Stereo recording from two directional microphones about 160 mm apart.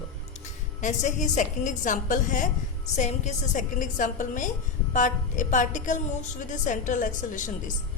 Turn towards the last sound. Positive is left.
turn(degrees=55)  # may be behind; listen again after turning